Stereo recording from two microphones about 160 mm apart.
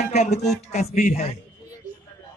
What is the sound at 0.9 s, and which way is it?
Speech, 60° left (ahead or behind).